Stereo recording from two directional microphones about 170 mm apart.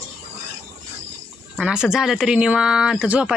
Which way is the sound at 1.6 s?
5° right (ahead or behind).